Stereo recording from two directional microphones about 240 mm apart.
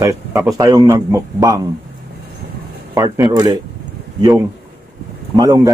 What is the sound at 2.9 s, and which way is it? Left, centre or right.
Speech, centre.